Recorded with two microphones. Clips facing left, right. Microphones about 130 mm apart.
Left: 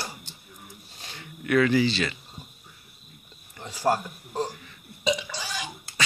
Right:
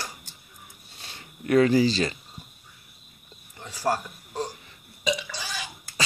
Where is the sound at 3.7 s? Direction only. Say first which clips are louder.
Left 2 dB; 20° left (ahead or behind).